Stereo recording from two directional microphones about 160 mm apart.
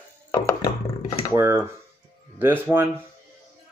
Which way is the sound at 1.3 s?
20° right (ahead or behind).